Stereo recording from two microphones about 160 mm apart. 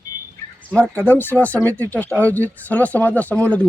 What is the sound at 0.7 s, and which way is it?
Speech, 10° left (ahead or behind).